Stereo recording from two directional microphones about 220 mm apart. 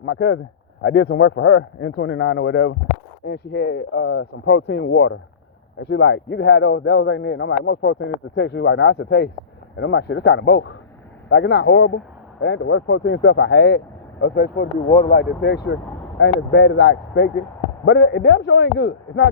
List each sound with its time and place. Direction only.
0.0 s speech: 50° left (ahead or behind)